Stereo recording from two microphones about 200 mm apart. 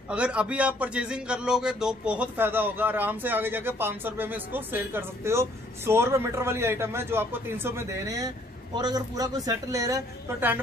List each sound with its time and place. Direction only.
0.1 s speech: 5° right (ahead or behind)